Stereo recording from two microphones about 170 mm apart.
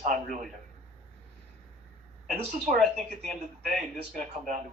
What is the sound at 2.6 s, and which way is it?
Speech, centre (ahead or behind).